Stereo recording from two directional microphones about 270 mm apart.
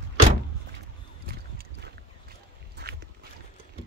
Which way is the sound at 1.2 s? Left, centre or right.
Right.